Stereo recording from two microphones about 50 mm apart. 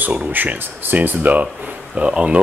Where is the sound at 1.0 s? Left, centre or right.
Right.